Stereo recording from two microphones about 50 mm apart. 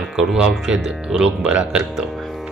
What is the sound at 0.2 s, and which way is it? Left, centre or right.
Speech, right.